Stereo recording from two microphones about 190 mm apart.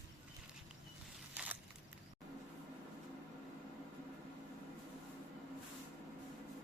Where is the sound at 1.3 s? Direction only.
10° right (ahead or behind).